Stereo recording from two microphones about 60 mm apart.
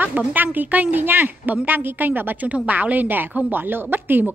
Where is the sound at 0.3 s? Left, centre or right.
Right.